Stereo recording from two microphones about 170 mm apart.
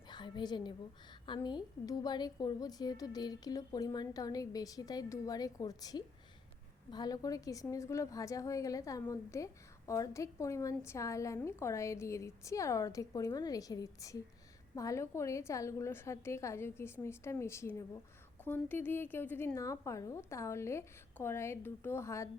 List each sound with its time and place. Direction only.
0.1 s a woman's voice: 25° left (ahead or behind)